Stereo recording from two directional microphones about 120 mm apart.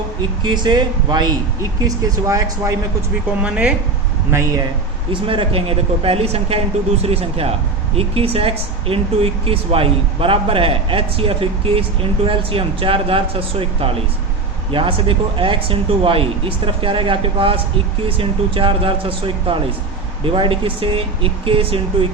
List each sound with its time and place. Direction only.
0.4 s speech: 40° right (ahead or behind)
2.0 s speech: 25° right (ahead or behind)
3.4 s speech: 10° right (ahead or behind)
4.3 s speech: 20° right (ahead or behind)
5.1 s speech: 45° right (ahead or behind)